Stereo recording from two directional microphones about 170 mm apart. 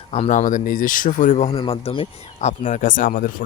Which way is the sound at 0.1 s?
40° left (ahead or behind).